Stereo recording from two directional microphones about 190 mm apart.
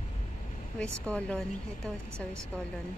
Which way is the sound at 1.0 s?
5° left (ahead or behind).